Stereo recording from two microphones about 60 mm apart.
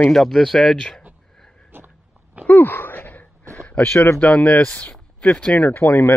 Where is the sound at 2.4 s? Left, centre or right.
Left.